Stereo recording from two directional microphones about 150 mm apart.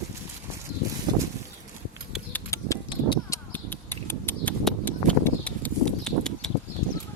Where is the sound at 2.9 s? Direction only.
30° left (ahead or behind).